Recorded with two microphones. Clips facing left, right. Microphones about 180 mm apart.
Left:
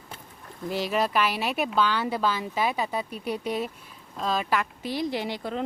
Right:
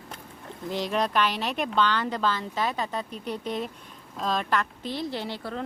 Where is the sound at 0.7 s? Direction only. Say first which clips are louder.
Left 1 dB; 5° left (ahead or behind).